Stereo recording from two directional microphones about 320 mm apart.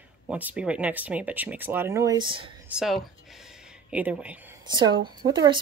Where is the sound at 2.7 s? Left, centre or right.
Centre.